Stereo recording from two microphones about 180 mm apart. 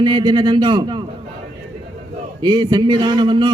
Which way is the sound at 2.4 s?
25° right (ahead or behind).